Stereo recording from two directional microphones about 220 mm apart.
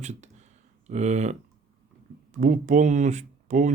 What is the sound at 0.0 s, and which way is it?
Speech, 30° right (ahead or behind).